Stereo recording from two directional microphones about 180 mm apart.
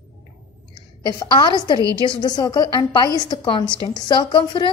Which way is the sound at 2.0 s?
20° left (ahead or behind).